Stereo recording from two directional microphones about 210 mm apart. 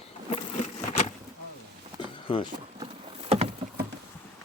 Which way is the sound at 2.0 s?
25° left (ahead or behind).